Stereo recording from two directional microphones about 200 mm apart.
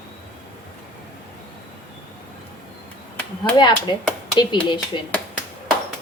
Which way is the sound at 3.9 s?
20° left (ahead or behind).